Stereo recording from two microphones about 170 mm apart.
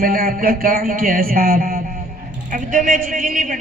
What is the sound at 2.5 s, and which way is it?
Speech, 50° right (ahead or behind).